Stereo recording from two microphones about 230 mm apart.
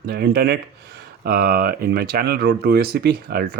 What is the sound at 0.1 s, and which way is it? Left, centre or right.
Speech, right.